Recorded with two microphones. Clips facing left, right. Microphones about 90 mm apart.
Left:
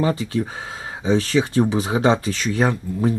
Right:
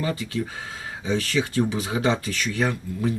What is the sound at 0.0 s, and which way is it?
Speech, 30° left (ahead or behind).